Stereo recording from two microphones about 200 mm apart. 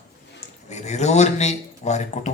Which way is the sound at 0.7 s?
35° left (ahead or behind).